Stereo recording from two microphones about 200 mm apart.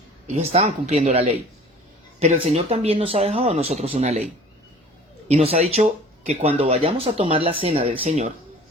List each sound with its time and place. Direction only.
0.3 s speech: 35° right (ahead or behind)
5.3 s speech: 30° right (ahead or behind)